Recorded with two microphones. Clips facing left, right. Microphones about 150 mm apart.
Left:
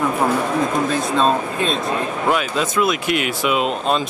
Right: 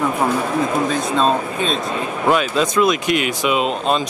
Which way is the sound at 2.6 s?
20° right (ahead or behind).